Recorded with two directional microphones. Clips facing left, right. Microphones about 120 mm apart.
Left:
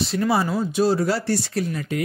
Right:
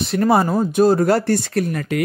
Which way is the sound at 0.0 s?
50° right (ahead or behind).